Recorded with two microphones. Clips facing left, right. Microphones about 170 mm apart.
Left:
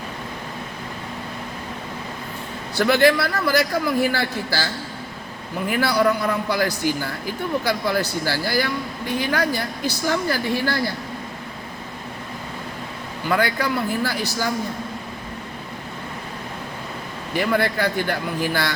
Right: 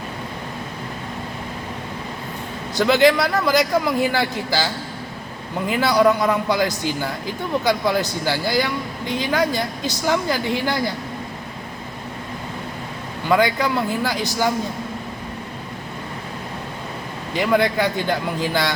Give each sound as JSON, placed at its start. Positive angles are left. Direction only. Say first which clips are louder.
{"t": 2.7, "sound": "a man's voice", "louder": "right 1 dB", "side_deg": -15}
{"t": 13.4, "sound": "a man's voice", "louder": "right 3 dB", "side_deg": -15}
{"t": 17.3, "sound": "a man's voice", "louder": "right 3 dB", "side_deg": -15}